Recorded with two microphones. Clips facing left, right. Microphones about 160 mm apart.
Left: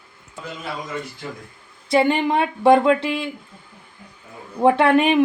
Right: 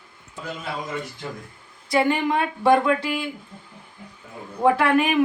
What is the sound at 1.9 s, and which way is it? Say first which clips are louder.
A woman's voice: left 3 dB; 25° left (ahead or behind).